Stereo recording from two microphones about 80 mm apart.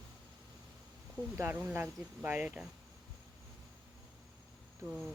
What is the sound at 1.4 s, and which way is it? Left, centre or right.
Speech, right.